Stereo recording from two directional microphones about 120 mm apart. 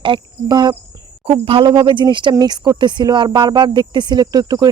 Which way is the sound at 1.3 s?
50° right (ahead or behind).